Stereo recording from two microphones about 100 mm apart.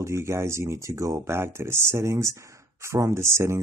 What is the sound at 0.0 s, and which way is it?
Speech, 30° right (ahead or behind).